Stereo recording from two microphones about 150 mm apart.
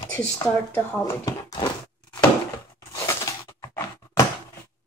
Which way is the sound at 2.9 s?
20° left (ahead or behind).